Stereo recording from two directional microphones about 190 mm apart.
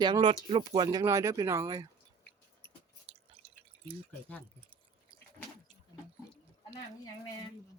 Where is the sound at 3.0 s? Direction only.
30° right (ahead or behind).